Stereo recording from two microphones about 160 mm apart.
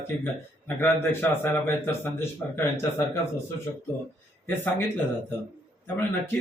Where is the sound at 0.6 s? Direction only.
15° left (ahead or behind).